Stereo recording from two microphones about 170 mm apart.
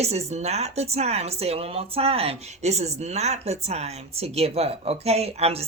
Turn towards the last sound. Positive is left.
turn(degrees=-35)  # may be behind; listen again after turning